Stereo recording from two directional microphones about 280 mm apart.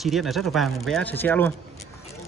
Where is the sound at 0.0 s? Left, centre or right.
Centre.